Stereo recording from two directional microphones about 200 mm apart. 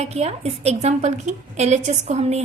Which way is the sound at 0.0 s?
30° right (ahead or behind).